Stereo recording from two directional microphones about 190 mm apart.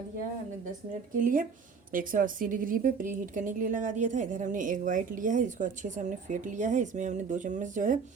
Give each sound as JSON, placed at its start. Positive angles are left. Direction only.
{"t": 1.2, "sound": "a woman's voice", "side_deg": -45}